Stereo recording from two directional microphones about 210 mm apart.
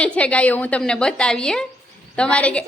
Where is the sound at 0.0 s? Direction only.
5° left (ahead or behind).